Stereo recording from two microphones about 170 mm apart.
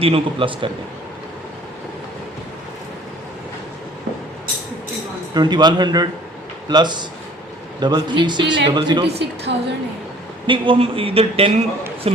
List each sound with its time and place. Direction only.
0.0 s speech: 30° right (ahead or behind)
5.3 s a man's voice: 25° right (ahead or behind)
9.1 s a woman's voice: 80° right
10.4 s speech: 30° right (ahead or behind)